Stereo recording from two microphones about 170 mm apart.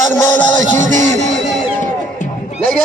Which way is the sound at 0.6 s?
45° right (ahead or behind).